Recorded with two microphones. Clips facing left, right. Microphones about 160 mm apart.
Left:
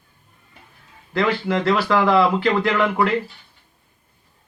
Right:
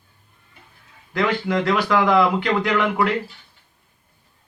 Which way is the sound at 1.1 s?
Centre (ahead or behind).